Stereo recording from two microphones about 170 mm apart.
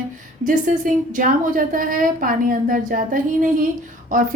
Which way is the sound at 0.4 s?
50° right (ahead or behind).